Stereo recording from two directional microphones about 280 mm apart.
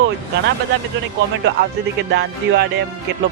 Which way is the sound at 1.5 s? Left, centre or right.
Right.